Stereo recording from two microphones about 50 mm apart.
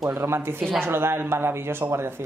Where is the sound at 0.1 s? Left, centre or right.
Right.